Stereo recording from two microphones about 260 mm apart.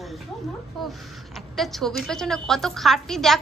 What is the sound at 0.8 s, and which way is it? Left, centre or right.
A woman's voice, centre.